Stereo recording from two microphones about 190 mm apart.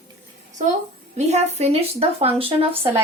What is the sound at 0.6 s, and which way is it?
Speech, 40° right (ahead or behind).